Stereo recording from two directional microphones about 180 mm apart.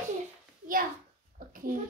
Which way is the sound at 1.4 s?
50° right (ahead or behind).